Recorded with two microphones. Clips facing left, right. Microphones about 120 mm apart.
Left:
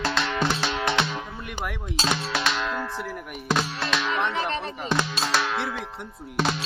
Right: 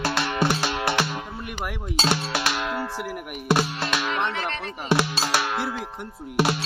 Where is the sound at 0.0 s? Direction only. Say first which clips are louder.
Right 1 dB; 10° right (ahead or behind).